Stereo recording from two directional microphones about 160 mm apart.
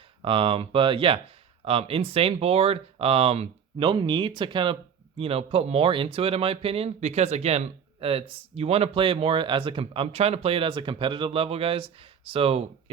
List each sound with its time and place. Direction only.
0.2 s speech: 35° right (ahead or behind)